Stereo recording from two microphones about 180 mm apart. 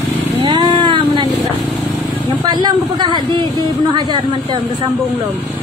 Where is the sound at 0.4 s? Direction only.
25° right (ahead or behind).